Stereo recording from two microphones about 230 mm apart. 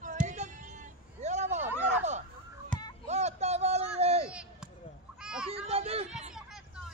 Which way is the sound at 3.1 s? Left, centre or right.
Right.